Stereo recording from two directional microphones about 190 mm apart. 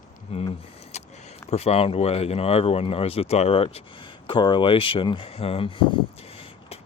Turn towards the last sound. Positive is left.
turn(degrees=25)  # may be behind; listen again after turning